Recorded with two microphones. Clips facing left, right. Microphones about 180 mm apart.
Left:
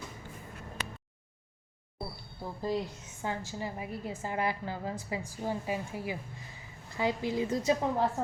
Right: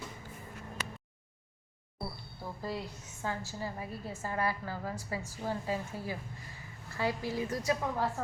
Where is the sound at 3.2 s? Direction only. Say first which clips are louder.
Left 2 dB; 15° left (ahead or behind).